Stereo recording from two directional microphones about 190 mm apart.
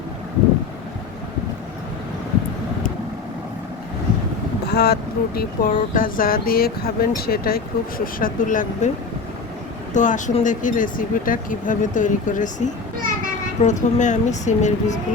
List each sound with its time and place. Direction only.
4.6 s speech: 60° left (ahead or behind); by 8.9 s 45° left (ahead or behind)
9.9 s speech: 40° left (ahead or behind)